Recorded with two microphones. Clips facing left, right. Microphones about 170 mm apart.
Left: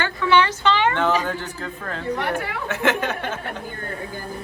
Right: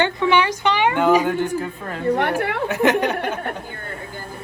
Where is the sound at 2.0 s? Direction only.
60° right (ahead or behind).